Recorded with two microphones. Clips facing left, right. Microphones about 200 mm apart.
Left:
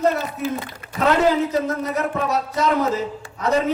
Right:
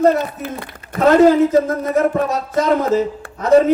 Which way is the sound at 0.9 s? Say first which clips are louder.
Right 7 dB; 50° right (ahead or behind).